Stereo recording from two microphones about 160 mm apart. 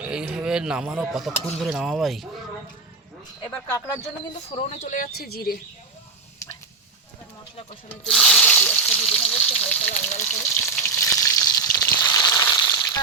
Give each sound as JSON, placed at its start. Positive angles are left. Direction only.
{"t": 0.0, "sound": "speech", "side_deg": -5}
{"t": 3.7, "sound": "speech", "side_deg": 15}
{"t": 4.5, "sound": "speech", "side_deg": 45}
{"t": 8.0, "sound": "speech", "side_deg": 5}
{"t": 10.8, "sound": "frying", "side_deg": 20}